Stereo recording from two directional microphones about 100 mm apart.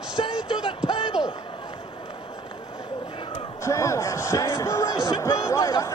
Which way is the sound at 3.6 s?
30° left (ahead or behind).